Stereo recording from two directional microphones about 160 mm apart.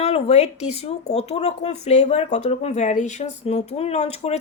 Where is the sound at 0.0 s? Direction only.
40° left (ahead or behind).